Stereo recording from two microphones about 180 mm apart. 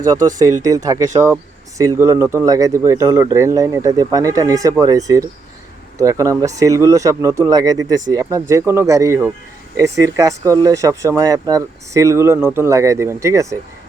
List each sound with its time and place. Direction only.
0.0 s speech: 20° right (ahead or behind)